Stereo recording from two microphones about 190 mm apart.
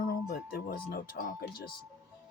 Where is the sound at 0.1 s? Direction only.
55° left (ahead or behind).